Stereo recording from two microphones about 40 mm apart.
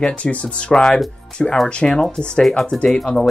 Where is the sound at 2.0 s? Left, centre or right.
Left.